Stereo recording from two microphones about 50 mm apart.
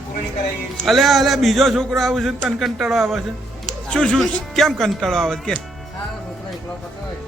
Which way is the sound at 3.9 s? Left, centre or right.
Centre.